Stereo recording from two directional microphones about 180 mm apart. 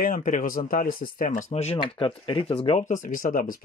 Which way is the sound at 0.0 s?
50° left (ahead or behind).